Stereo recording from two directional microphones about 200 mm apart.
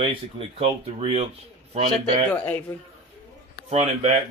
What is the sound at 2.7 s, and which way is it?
Speech, 10° left (ahead or behind).